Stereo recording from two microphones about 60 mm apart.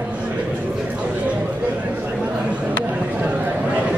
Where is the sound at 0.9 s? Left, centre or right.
Centre.